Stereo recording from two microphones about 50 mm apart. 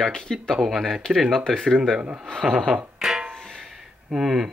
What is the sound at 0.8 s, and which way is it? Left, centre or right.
Speech, centre.